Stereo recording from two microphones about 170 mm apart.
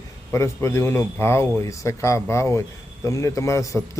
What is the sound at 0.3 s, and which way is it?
Speech, 15° left (ahead or behind).